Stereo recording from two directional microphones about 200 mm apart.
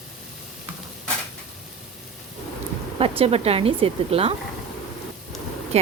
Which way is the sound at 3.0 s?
30° right (ahead or behind).